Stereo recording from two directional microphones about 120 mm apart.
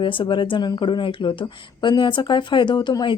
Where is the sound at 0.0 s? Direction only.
45° left (ahead or behind).